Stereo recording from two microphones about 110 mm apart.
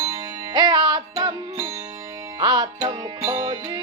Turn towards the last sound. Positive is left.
turn(degrees=-35)  # may be behind; listen again after turning